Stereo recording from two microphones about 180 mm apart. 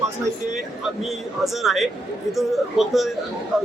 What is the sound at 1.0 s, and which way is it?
A man's voice, centre (ahead or behind).